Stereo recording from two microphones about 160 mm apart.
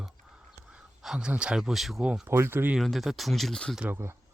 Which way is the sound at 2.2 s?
15° right (ahead or behind).